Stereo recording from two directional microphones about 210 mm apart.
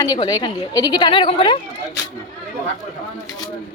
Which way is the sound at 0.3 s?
15° left (ahead or behind).